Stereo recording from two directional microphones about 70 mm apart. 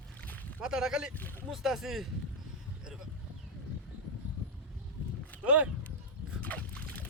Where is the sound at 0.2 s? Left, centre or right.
Left.